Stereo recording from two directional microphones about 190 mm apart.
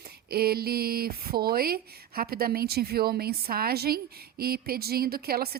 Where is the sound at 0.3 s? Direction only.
55° right (ahead or behind).